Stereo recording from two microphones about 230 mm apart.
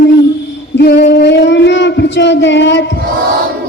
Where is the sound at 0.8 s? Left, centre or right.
Left.